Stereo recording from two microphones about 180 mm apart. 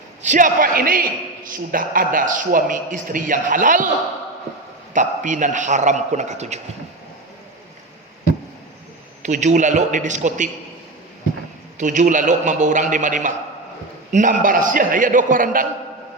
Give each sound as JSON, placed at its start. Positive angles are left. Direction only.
{"t": 0.2, "sound": "a man's voice", "side_deg": -45}
{"t": 4.9, "sound": "a man's voice", "side_deg": -45}
{"t": 9.2, "sound": "a man's voice", "side_deg": -40}
{"t": 11.8, "sound": "a man's voice", "side_deg": -45}